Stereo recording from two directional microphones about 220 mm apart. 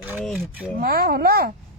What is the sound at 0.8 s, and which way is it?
Speech, 40° right (ahead or behind).